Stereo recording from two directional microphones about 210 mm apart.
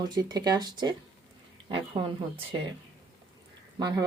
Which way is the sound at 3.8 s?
20° right (ahead or behind).